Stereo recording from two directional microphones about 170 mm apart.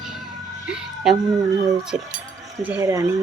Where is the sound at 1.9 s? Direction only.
5° right (ahead or behind).